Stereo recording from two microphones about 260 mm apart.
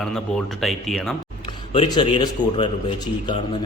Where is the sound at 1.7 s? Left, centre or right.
Centre.